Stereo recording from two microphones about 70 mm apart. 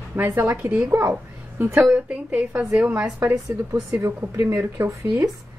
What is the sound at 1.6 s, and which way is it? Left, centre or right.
Speech, right.